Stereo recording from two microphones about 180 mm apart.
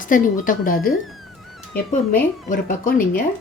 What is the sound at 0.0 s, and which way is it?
Speech, 50° left (ahead or behind).